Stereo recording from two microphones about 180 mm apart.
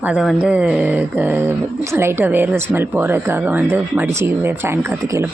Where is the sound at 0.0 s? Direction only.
5° right (ahead or behind).